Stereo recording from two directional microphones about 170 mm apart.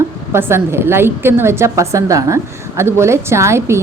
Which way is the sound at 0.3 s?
15° right (ahead or behind).